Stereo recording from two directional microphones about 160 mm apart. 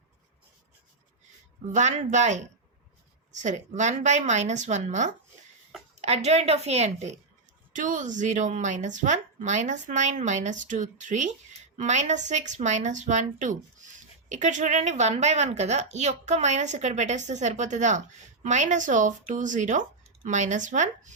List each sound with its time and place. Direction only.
1.7 s a woman's voice: 50° right (ahead or behind)